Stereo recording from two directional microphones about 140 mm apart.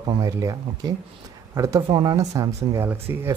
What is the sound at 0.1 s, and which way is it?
Speech, 25° right (ahead or behind).